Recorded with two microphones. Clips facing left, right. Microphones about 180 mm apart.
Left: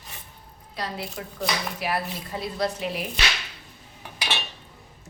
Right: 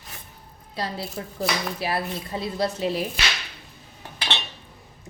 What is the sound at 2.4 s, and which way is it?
Speech, 30° right (ahead or behind).